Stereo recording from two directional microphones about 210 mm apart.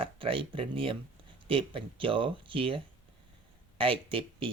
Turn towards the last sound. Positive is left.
turn(degrees=-25)  # may be behind; listen again after turning